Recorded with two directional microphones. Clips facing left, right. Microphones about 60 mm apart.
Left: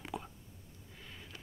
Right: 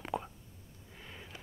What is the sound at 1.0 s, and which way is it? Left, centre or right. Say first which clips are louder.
Sniff: right 2 dB; centre.